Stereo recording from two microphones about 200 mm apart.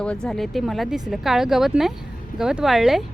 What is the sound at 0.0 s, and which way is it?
Speech, 5° left (ahead or behind).